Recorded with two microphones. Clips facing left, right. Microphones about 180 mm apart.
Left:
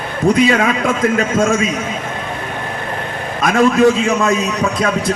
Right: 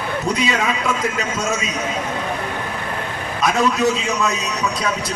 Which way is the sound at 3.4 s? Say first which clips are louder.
Left 6 dB; 50° left (ahead or behind).